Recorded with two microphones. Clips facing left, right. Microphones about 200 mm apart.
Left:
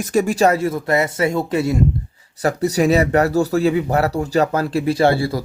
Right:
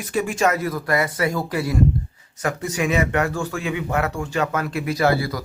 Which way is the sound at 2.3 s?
35° left (ahead or behind).